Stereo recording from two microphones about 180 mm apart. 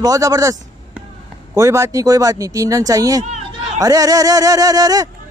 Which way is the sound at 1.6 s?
15° right (ahead or behind).